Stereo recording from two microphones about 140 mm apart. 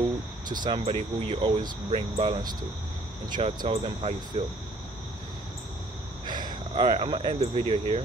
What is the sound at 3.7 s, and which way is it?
Speech, 45° right (ahead or behind).